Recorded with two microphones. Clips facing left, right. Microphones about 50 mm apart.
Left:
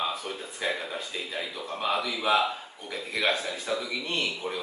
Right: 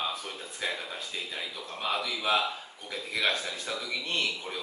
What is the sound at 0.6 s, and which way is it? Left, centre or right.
Speech, centre.